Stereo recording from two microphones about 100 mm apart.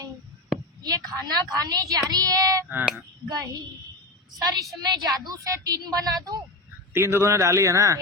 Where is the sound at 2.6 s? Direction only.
15° right (ahead or behind).